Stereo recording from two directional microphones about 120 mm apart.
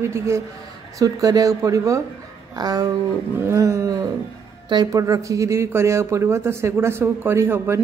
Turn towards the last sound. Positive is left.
turn(degrees=-20)  # may be behind; listen again after turning